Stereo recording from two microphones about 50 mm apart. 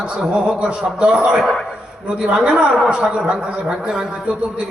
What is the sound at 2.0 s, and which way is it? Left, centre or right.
A man's voice, right.